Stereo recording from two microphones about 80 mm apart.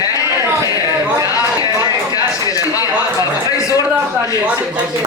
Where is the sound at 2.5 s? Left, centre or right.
Left.